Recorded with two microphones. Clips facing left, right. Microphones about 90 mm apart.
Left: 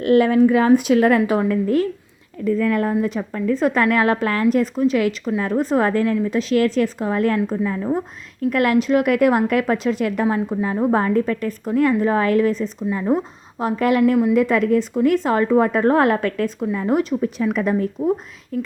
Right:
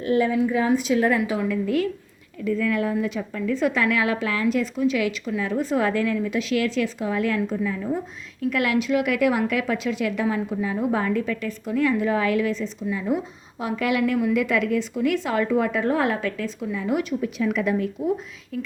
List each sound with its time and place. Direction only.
0.0 s a woman's voice: 70° left (ahead or behind)
1.4 s a woman's voice: 45° left (ahead or behind)